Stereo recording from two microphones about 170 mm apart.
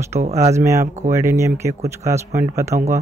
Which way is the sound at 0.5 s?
15° right (ahead or behind).